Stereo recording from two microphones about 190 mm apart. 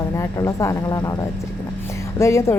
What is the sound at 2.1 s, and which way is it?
Speech, 15° left (ahead or behind).